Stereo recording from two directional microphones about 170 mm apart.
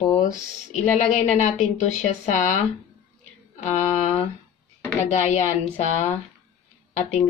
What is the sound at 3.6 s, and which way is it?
Speech, 45° left (ahead or behind).